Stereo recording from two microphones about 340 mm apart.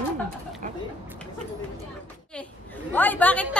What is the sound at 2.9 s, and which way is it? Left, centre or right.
Speech, centre.